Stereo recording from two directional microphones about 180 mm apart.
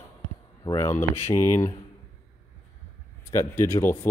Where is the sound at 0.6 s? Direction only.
20° left (ahead or behind).